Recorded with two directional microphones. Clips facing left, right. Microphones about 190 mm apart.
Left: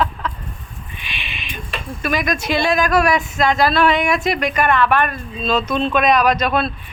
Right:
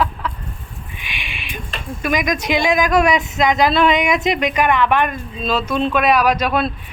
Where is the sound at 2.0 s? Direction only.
15° right (ahead or behind).